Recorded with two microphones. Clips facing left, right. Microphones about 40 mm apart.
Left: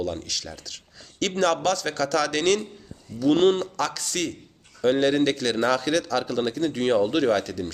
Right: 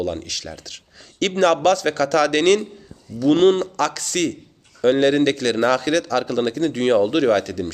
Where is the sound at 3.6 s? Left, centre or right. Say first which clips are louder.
Right 5 dB; centre.